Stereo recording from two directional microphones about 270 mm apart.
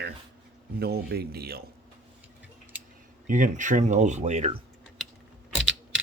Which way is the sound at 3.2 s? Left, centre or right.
Right.